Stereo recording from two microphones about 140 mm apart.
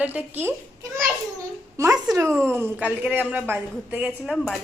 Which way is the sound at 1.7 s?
20° right (ahead or behind).